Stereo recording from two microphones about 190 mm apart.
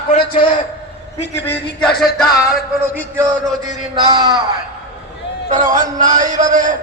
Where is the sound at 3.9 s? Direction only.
20° right (ahead or behind).